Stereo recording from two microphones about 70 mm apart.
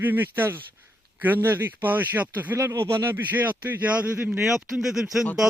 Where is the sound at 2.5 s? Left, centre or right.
Right.